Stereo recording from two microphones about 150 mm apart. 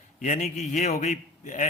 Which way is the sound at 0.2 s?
60° left (ahead or behind).